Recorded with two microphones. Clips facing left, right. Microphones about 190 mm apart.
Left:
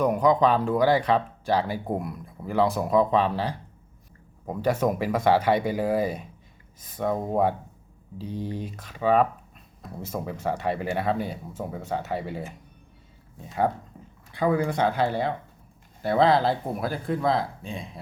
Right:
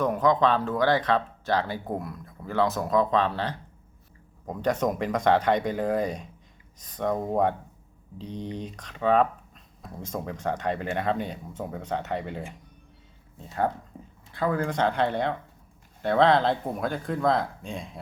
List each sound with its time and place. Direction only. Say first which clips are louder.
0.0 s speech: left 2 dB; 10° left (ahead or behind)
14.3 s speech: left 3 dB; 10° left (ahead or behind)